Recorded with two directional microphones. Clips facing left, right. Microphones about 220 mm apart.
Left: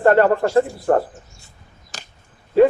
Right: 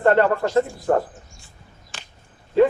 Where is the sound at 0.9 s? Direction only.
55° left (ahead or behind).